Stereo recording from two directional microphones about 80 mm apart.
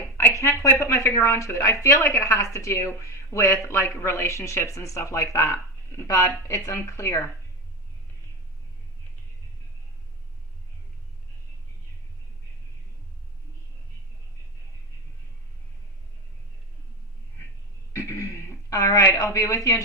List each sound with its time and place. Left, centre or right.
0.2 s a woman's voice: left
17.9 s throat clearing: left